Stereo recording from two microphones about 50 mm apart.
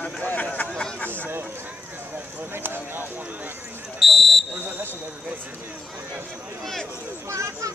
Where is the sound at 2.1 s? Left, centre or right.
Right.